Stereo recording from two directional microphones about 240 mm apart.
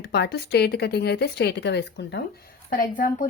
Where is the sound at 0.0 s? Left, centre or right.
Left.